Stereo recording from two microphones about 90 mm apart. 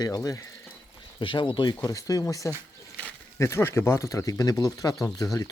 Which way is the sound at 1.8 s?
40° left (ahead or behind).